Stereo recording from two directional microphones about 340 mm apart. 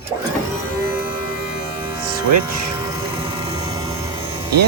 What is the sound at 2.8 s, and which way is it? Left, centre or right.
Vehicle, centre.